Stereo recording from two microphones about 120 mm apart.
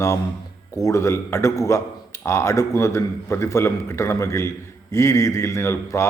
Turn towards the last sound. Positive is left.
turn(degrees=20)  # may be behind; listen again after turning